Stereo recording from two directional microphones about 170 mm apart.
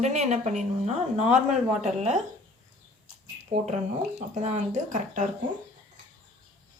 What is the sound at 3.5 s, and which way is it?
A woman's voice, 40° right (ahead or behind).